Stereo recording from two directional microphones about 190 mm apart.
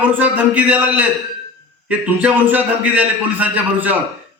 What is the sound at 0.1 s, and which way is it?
A man's voice, 10° right (ahead or behind).